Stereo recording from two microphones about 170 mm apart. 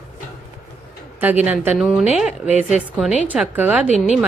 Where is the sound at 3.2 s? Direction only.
5° right (ahead or behind).